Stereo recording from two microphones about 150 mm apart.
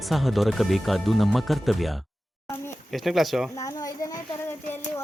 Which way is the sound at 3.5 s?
25° left (ahead or behind).